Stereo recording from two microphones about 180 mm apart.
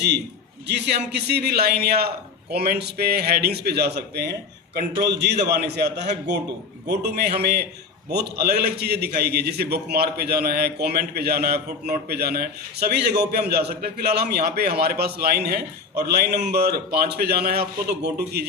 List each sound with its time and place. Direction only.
0.7 s a man's voice: 70° right (ahead or behind)